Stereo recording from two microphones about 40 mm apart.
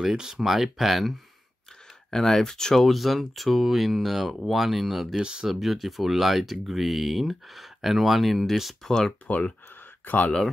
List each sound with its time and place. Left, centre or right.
0.0 s speech: centre
2.0 s speech: centre
2.8 s speech: centre
5.1 s speech: centre
5.5 s speech: centre
8.8 s speech: centre
10.0 s speech: left